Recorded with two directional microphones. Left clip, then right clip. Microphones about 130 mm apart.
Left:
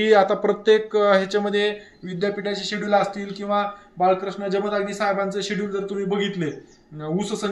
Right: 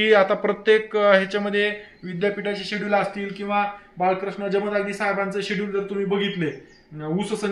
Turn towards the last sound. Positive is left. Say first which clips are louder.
# even
turn(degrees=20)  # may be behind; listen again after turning